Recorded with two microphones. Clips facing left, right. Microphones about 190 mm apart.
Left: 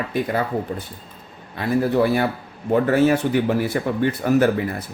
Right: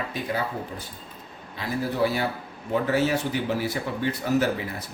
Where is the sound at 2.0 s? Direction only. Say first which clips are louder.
Left 5 dB; 60° left (ahead or behind).